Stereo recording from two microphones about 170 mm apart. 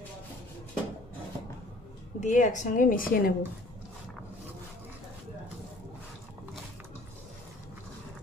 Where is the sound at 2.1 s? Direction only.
45° left (ahead or behind).